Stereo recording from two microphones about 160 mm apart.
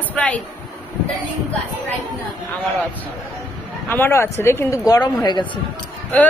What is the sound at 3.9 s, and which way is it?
Speech, 15° left (ahead or behind).